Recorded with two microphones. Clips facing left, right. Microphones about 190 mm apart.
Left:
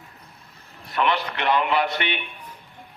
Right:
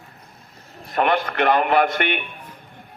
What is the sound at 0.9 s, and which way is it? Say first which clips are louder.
Speech: right 3 dB; 45° right (ahead or behind).